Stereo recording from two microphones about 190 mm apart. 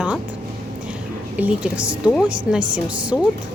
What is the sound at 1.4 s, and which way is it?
Speech, 5° right (ahead or behind).